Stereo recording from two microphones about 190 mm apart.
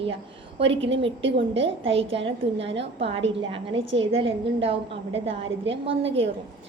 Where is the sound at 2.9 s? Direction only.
30° right (ahead or behind).